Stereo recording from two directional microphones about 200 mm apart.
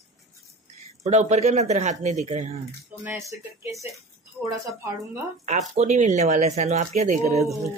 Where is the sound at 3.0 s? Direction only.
10° right (ahead or behind).